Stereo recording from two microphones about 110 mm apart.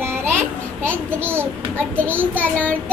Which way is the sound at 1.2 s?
20° right (ahead or behind).